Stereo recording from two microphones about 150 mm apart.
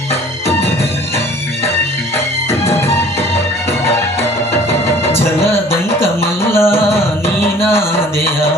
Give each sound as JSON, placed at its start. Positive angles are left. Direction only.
{"t": 2.1, "sound": "music", "side_deg": 15}
{"t": 5.1, "sound": "music", "side_deg": 15}
{"t": 7.7, "sound": "a sound", "side_deg": 15}